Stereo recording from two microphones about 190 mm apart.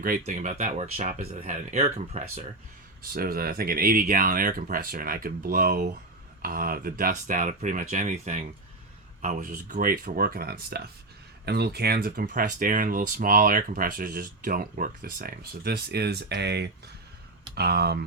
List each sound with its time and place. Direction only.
0.0 s speech: 45° right (ahead or behind)
3.0 s speech: 50° right (ahead or behind)